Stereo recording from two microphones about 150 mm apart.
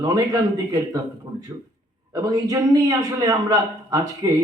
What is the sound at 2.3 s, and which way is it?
A man's voice, 20° right (ahead or behind).